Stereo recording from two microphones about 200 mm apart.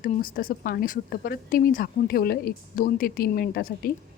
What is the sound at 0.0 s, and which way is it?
Speech, 45° left (ahead or behind).